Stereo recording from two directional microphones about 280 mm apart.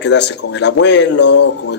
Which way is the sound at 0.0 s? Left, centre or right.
Left.